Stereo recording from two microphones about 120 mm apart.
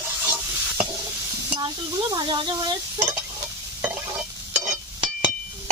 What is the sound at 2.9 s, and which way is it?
Stir, 15° right (ahead or behind).